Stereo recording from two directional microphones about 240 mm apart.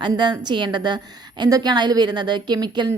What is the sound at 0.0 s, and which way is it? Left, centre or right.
A woman's voice, centre.